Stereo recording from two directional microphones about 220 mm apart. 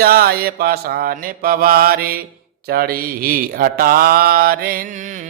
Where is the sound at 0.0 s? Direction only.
45° right (ahead or behind).